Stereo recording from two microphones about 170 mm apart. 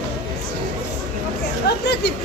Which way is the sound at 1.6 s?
75° left (ahead or behind).